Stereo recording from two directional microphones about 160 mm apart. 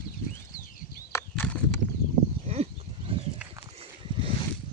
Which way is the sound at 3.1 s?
35° right (ahead or behind).